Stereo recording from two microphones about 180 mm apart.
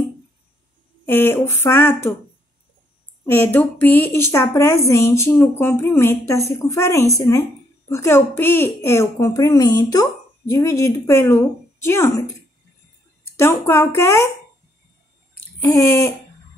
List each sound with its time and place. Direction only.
1.0 s a child's voice: 10° left (ahead or behind)
3.3 s a child's voice: 10° left (ahead or behind)
13.4 s a child's voice: 15° left (ahead or behind)
15.7 s a child's voice: 15° left (ahead or behind)